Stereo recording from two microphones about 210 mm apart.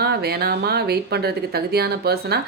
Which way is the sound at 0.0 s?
50° right (ahead or behind).